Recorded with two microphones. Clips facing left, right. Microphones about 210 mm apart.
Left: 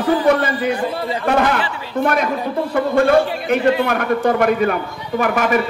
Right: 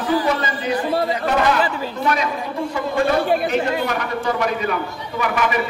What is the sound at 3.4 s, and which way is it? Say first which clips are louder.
A man's voice: left 4 dB; 55° left (ahead or behind).